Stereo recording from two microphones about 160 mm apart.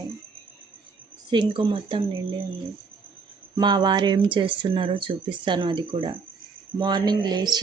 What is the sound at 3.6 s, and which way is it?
Speech, 25° right (ahead or behind).